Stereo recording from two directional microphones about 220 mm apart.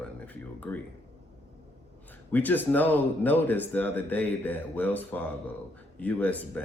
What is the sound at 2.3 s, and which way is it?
Speech, 10° left (ahead or behind).